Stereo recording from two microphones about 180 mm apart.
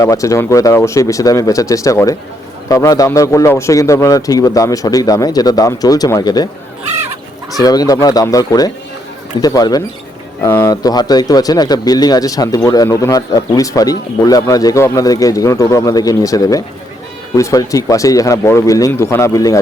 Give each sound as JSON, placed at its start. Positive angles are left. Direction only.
{"t": 0.0, "sound": "speech", "side_deg": 15}
{"t": 7.6, "sound": "speech", "side_deg": 20}